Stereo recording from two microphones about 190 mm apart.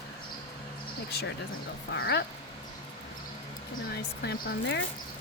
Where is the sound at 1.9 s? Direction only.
60° left (ahead or behind).